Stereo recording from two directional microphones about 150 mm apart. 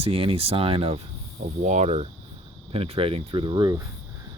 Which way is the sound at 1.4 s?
55° right (ahead or behind).